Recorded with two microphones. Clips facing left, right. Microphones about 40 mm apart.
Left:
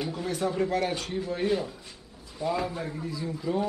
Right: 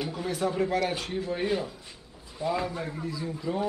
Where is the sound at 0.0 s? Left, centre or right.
Centre.